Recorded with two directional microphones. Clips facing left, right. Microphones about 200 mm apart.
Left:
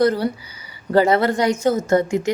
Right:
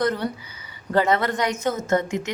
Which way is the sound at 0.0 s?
30° left (ahead or behind).